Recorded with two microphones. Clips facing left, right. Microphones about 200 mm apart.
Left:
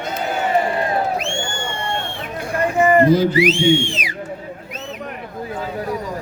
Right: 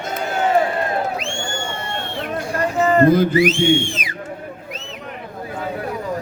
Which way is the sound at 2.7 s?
15° left (ahead or behind).